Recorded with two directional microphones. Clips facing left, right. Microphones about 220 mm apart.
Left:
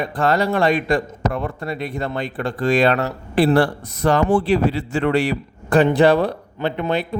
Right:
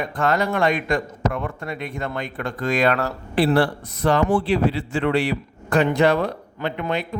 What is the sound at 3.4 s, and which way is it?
A man's voice, 45° left (ahead or behind).